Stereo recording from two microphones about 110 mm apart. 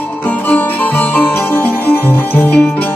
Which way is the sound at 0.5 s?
15° left (ahead or behind).